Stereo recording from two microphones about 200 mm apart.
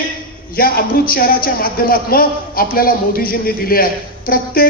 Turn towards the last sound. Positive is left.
turn(degrees=45)  # may be behind; listen again after turning